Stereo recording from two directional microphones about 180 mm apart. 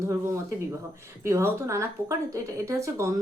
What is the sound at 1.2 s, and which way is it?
A woman's voice, 15° right (ahead or behind).